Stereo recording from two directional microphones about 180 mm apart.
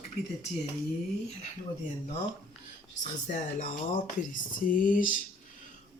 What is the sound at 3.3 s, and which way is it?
Speech, 50° left (ahead or behind).